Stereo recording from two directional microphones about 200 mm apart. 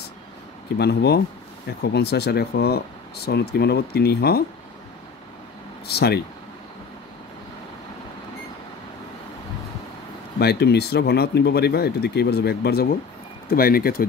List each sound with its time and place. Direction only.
0.7 s speech: 55° left (ahead or behind)
5.9 s speech: 55° left (ahead or behind)
10.4 s speech: 55° left (ahead or behind)